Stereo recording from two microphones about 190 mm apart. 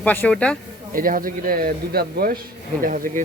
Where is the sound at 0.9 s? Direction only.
45° right (ahead or behind).